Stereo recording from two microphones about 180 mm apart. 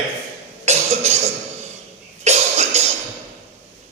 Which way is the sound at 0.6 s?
35° right (ahead or behind).